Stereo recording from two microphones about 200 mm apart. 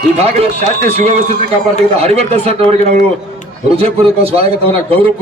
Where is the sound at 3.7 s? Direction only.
30° right (ahead or behind).